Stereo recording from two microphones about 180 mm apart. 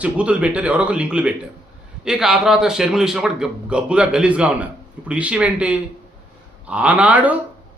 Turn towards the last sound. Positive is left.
turn(degrees=-10)  # may be behind; listen again after turning